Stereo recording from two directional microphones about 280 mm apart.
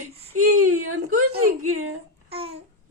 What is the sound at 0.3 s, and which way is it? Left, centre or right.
Whimper, right.